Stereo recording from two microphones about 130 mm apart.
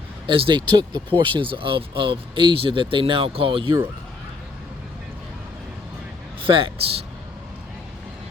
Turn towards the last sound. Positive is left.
turn(degrees=-45)  # may be behind; listen again after turning